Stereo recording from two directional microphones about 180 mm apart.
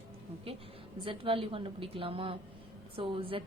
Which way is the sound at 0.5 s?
30° right (ahead or behind).